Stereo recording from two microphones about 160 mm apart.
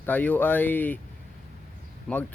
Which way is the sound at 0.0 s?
10° left (ahead or behind).